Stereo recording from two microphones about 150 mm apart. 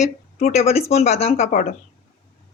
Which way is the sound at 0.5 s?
45° left (ahead or behind).